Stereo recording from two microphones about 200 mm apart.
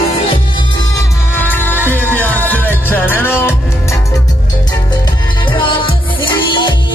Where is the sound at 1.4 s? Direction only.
10° left (ahead or behind).